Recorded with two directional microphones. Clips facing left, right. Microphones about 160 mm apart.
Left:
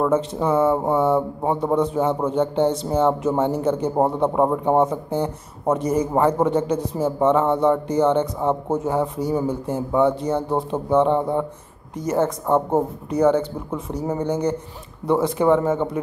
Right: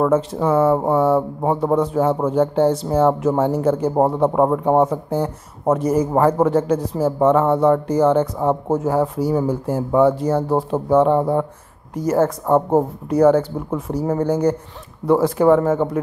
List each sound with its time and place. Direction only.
0.0 s speech: 5° right (ahead or behind)